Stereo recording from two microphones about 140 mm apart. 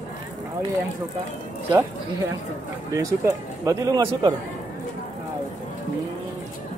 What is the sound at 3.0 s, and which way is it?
Speech, 25° right (ahead or behind).